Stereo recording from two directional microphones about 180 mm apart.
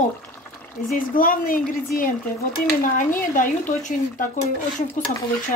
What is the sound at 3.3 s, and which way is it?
Speech, 45° left (ahead or behind).